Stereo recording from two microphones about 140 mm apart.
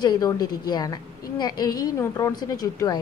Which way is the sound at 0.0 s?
30° left (ahead or behind).